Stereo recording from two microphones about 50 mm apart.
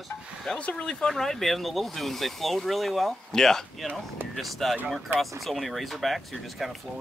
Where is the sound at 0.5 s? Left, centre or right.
Left.